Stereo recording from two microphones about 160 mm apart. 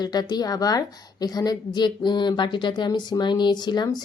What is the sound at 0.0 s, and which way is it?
Speech, 25° left (ahead or behind).